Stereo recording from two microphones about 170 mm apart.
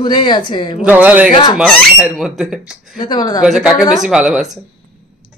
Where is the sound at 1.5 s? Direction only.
Centre (ahead or behind).